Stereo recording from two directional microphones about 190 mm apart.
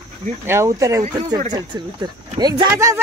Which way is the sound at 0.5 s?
15° right (ahead or behind).